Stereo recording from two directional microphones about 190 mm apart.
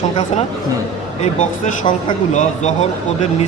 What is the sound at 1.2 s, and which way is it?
Speech, 40° left (ahead or behind).